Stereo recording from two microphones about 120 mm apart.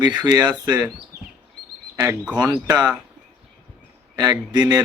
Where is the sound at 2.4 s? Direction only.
35° right (ahead or behind).